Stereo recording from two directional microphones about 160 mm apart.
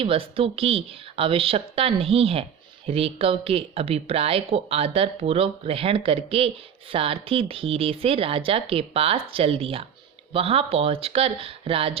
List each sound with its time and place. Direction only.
0.0 s speech: 35° right (ahead or behind)